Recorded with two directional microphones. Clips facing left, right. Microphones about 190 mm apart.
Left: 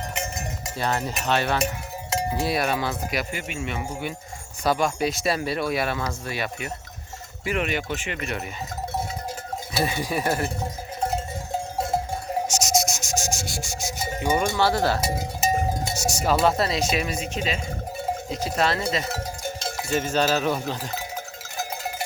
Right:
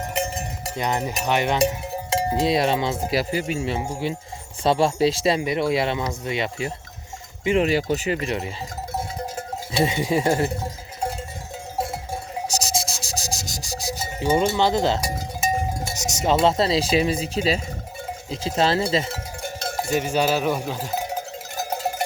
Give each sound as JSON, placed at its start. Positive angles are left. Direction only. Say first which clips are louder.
{"t": 0.1, "sound": "cowbell", "louder": "right 5 dB", "side_deg": -35}
{"t": 0.8, "sound": "cowbell", "louder": "right 2 dB", "side_deg": -15}
{"t": 2.0, "sound": "speech", "louder": "right 4 dB", "side_deg": -25}
{"t": 9.8, "sound": "speech", "louder": "right 5 dB", "side_deg": -25}
{"t": 12.5, "sound": "sanding", "louder": "left 1 dB", "side_deg": -35}
{"t": 14.5, "sound": "speech", "louder": "right 2 dB", "side_deg": -20}
{"t": 19.9, "sound": "cowbell", "louder": "right 1 dB", "side_deg": -10}